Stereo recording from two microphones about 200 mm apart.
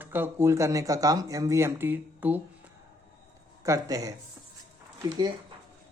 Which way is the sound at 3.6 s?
15° right (ahead or behind).